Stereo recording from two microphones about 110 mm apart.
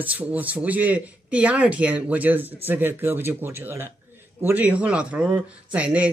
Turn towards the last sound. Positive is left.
turn(degrees=-10)  # may be behind; listen again after turning